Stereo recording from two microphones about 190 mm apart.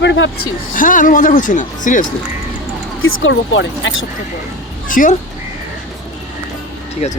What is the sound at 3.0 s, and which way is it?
Speech, 85° left.